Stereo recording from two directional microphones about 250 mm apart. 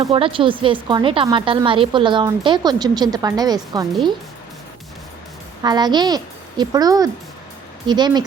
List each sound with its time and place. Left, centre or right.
0.0 s speech: right
5.6 s speech: centre